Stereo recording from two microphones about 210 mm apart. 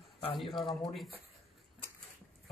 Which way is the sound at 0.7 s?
Centre (ahead or behind).